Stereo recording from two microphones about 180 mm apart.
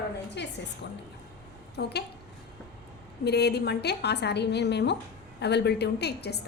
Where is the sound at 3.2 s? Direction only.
65° left (ahead or behind).